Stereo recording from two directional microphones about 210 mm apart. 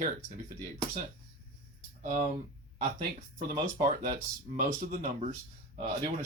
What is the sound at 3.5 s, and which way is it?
Speech, 40° right (ahead or behind).